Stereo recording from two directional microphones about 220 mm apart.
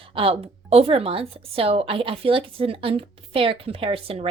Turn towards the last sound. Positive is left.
turn(degrees=-25)  # may be behind; listen again after turning